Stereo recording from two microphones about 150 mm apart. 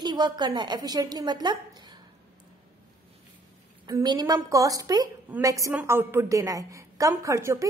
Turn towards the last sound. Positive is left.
turn(degrees=-20)  # may be behind; listen again after turning